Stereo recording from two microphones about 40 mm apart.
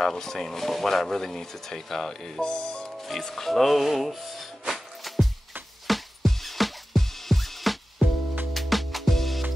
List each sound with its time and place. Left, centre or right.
0.0 s speech: centre
2.4 s music: left
3.0 s music: centre